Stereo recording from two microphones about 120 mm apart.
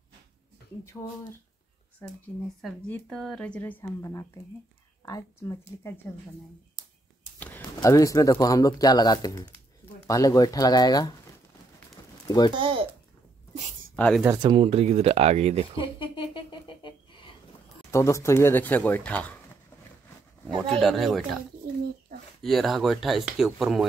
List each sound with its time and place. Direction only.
1.0 s speech: 15° left (ahead or behind)
3.1 s speech: 5° left (ahead or behind); by 5.9 s 30° left (ahead or behind)
7.8 s speech: 25° left (ahead or behind)
12.3 s speech: 35° left (ahead or behind)
12.5 s speech: 50° right (ahead or behind)
13.9 s speech: 10° left (ahead or behind)
14.4 s speech: 50° right (ahead or behind)
15.8 s a sound: 45° left (ahead or behind)
17.9 s speech: 25° left (ahead or behind)
20.8 s speech: centre (ahead or behind)
22.4 s speech: centre (ahead or behind)